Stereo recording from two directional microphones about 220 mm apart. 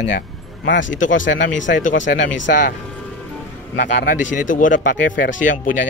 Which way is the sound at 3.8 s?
40° left (ahead or behind).